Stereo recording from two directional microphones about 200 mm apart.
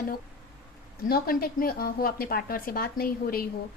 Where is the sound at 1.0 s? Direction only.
45° left (ahead or behind).